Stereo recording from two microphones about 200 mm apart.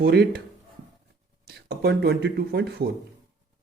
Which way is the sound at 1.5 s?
55° right (ahead or behind).